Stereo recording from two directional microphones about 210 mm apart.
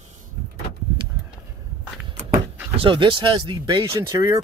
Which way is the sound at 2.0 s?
10° right (ahead or behind).